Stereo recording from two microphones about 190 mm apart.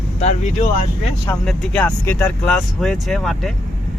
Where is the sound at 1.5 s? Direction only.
10° left (ahead or behind).